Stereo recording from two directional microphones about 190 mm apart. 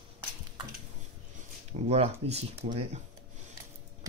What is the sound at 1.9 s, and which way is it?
Speech, 35° right (ahead or behind).